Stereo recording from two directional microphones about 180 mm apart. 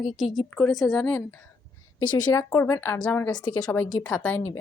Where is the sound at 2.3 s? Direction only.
20° left (ahead or behind).